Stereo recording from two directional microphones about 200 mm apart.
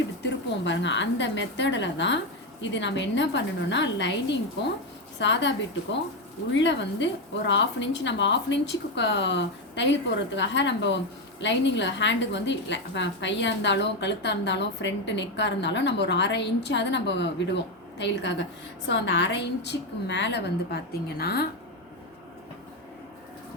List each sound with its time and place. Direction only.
0.2 s a woman's voice: 60° left (ahead or behind)